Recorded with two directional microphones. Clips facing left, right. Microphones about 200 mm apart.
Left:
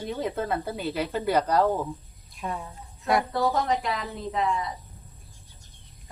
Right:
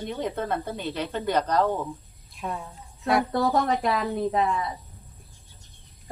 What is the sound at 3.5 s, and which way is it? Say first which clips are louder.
Speech: right 3 dB; 50° right (ahead or behind).